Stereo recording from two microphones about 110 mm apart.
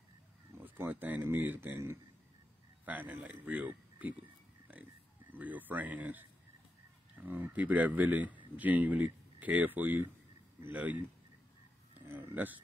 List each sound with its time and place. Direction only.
0.7 s speech: 20° right (ahead or behind)
5.3 s speech: 15° right (ahead or behind)
7.2 s speech: 15° right (ahead or behind)
12.1 s a sound: 20° right (ahead or behind)